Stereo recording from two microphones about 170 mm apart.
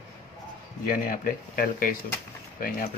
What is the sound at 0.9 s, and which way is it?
Speech, 55° left (ahead or behind).